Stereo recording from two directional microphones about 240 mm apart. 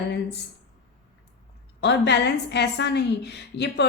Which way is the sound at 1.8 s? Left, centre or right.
Left.